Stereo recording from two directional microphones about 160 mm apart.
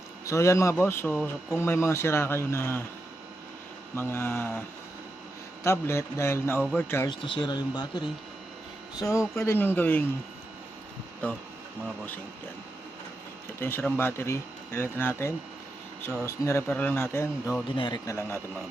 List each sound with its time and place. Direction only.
0.3 s speech: 20° left (ahead or behind)
3.9 s speech: 15° left (ahead or behind)
5.6 s speech: 15° left (ahead or behind)
7.1 s speech: 30° left (ahead or behind); by 10.0 s 10° left (ahead or behind)
11.2 s speech: 10° left (ahead or behind)
13.6 s speech: 15° left (ahead or behind)
17.7 s speech: 25° left (ahead or behind)